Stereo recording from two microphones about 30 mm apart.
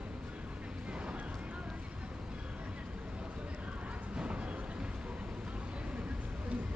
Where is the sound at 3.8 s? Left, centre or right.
Right.